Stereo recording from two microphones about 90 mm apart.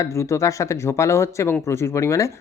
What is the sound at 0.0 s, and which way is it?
Speech, 35° left (ahead or behind).